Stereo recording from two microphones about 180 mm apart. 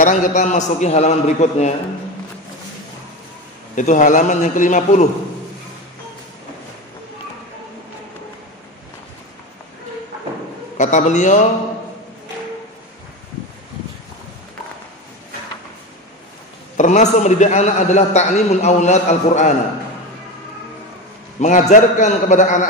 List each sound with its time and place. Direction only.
0.0 s a man's voice: 45° left (ahead or behind)
3.7 s a man's voice: 45° left (ahead or behind)
10.8 s a man's voice: 45° left (ahead or behind)
16.7 s a man's voice: 40° left (ahead or behind)
21.4 s a man's voice: 40° left (ahead or behind)